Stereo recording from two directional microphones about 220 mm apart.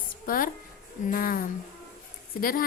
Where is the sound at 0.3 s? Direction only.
40° left (ahead or behind).